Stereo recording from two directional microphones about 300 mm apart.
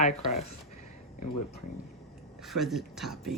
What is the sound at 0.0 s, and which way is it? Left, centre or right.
Speech, left.